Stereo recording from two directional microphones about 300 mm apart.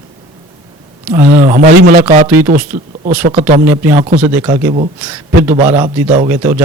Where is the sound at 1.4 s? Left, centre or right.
Right.